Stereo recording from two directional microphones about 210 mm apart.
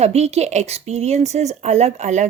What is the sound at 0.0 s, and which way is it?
A woman's voice, 30° right (ahead or behind).